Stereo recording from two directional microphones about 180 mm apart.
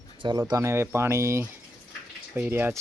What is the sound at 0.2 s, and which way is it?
Speech, 25° right (ahead or behind).